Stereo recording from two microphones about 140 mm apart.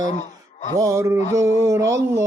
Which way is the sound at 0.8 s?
20° right (ahead or behind).